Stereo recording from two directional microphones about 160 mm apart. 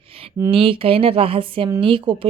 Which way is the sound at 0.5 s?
35° right (ahead or behind).